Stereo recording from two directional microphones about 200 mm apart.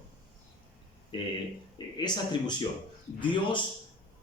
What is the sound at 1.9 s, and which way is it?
Speech, 20° left (ahead or behind).